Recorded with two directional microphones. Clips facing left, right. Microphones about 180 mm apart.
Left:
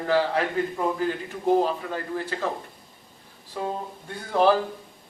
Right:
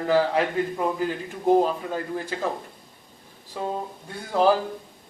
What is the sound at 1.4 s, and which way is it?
Speech, 15° right (ahead or behind).